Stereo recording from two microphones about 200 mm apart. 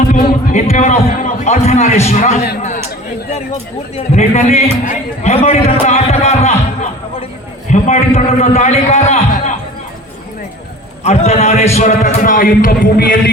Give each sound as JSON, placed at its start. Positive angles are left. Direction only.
{"t": 0.1, "sound": "a sound", "side_deg": 35}
{"t": 2.0, "sound": "a man's voice", "side_deg": 35}
{"t": 2.6, "sound": "a sound", "side_deg": 35}
{"t": 3.9, "sound": "a man's voice", "side_deg": 35}
{"t": 7.7, "sound": "a man's voice", "side_deg": 35}
{"t": 11.0, "sound": "a man's voice", "side_deg": 30}
{"t": 11.8, "sound": "music", "side_deg": 35}